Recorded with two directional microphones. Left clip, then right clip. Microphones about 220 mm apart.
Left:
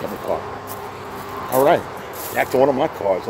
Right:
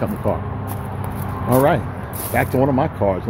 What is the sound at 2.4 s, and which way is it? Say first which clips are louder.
Speech: left 1 dB; 30° left (ahead or behind).